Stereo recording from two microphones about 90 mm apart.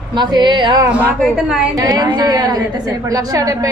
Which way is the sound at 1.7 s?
45° right (ahead or behind).